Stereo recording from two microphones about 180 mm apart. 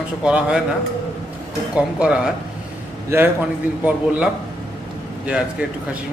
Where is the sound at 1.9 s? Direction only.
5° right (ahead or behind).